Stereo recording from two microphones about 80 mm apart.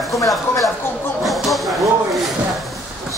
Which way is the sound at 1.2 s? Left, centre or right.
Centre.